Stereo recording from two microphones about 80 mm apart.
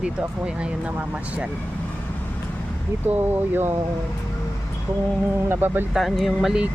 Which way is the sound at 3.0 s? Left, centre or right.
Right.